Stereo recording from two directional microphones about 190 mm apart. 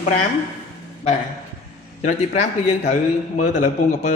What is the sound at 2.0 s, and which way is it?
A man's voice, 35° left (ahead or behind).